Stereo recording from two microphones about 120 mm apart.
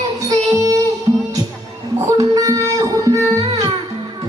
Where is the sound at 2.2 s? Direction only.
30° right (ahead or behind).